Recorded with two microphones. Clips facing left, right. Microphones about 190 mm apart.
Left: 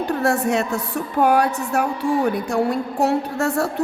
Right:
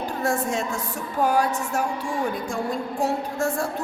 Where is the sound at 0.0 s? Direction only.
70° left (ahead or behind).